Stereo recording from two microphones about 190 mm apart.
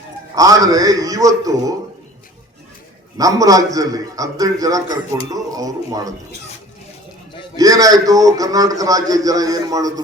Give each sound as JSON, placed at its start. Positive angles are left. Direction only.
{"t": 0.3, "sound": "a man's voice", "side_deg": -20}
{"t": 3.2, "sound": "a man's voice", "side_deg": -20}
{"t": 7.5, "sound": "a man's voice", "side_deg": -20}